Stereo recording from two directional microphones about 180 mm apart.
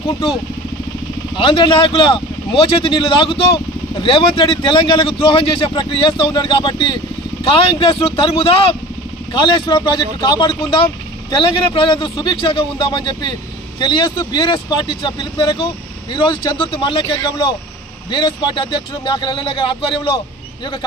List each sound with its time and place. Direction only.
1.3 s speech: 25° left (ahead or behind)